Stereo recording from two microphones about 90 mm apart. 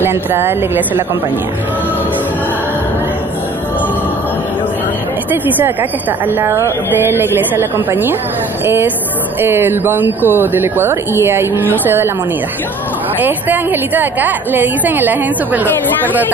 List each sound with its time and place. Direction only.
0.0 s a woman's voice: 25° right (ahead or behind)
5.3 s a woman's voice: 20° right (ahead or behind)
13.2 s a woman's voice: 20° right (ahead or behind)